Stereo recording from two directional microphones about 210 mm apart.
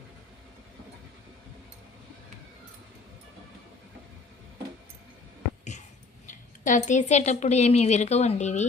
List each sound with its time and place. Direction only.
6.7 s a woman's voice: 35° left (ahead or behind)